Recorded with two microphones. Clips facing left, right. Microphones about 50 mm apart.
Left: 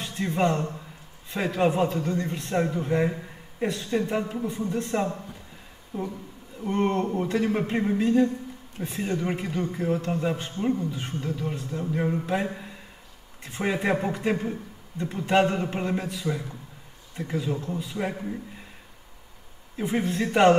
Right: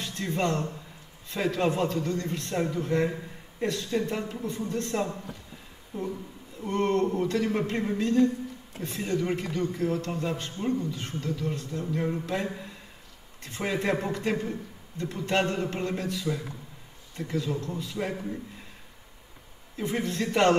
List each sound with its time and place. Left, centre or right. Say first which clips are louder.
0.0 s a man's voice: left 4 dB; centre
19.8 s a man's voice: left 3 dB; centre